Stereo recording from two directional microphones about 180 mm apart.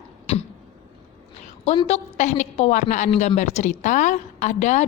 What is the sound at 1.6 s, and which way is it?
A woman's voice, 30° left (ahead or behind).